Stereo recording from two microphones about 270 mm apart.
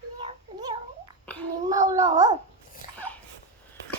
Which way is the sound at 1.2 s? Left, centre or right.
Centre.